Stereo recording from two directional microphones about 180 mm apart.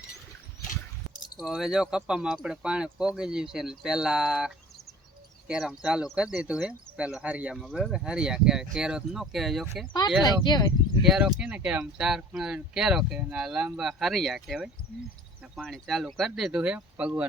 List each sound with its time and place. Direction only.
1.4 s speech: centre (ahead or behind)
10.2 s speech: 25° left (ahead or behind)
11.0 s speech: centre (ahead or behind)